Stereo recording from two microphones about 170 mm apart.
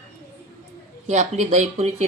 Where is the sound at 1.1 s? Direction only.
45° right (ahead or behind).